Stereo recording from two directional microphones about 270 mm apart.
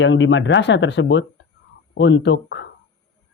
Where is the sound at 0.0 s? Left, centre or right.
Left.